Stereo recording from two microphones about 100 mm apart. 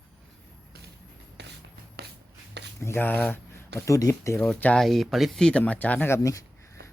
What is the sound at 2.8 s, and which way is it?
Speech, 25° left (ahead or behind).